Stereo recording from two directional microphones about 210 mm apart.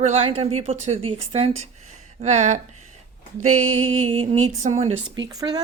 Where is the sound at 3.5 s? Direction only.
80° right.